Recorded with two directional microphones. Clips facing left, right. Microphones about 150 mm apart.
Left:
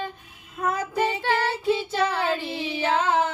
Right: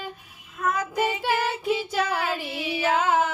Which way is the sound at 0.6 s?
30° left (ahead or behind).